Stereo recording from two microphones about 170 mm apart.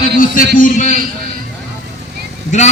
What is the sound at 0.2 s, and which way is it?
Speech, 55° left (ahead or behind).